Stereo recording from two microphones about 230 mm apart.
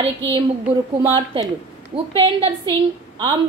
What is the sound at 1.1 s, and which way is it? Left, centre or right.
A woman's voice, right.